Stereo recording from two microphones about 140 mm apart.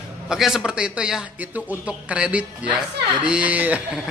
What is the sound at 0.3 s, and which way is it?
Speech, 5° right (ahead or behind).